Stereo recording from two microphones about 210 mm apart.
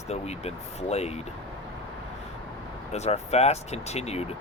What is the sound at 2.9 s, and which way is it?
Speech, 30° left (ahead or behind).